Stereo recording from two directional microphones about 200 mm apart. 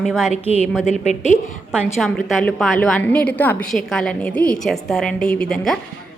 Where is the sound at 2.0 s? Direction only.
5° left (ahead or behind).